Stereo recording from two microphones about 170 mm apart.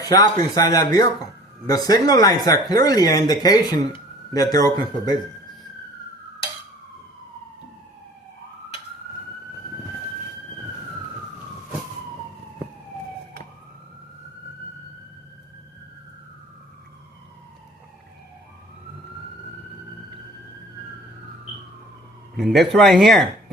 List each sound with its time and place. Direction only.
0.0 s speech: 20° left (ahead or behind)
22.4 s a sound: centre (ahead or behind)
22.7 s speech: centre (ahead or behind)